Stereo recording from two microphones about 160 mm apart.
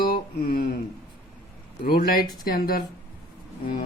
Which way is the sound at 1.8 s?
70° left (ahead or behind).